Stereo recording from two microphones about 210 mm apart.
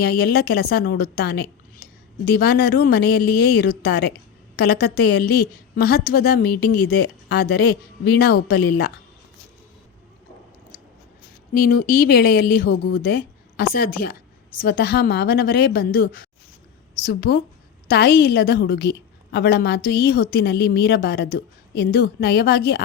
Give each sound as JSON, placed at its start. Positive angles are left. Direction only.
{"t": 0.0, "sound": "a woman's voice", "side_deg": 50}
{"t": 11.5, "sound": "a woman's voice", "side_deg": 45}